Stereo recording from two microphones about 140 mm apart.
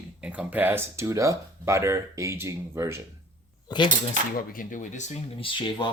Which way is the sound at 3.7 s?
30° left (ahead or behind).